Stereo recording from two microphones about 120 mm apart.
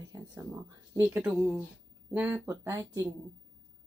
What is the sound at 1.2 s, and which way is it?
Speech, 5° right (ahead or behind).